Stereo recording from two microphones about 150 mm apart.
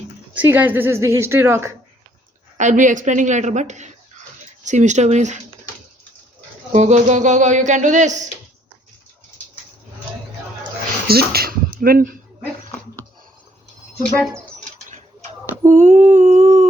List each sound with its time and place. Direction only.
0.3 s a woman's voice: 10° right (ahead or behind)
2.6 s speech: 55° right (ahead or behind)
6.7 s speech: 55° right (ahead or behind)
11.1 s speech: 90° right; by 12.1 s 75° right (ahead or behind)
15.6 s a sound: 60° right (ahead or behind)